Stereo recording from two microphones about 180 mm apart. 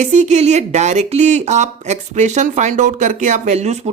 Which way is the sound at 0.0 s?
40° right (ahead or behind).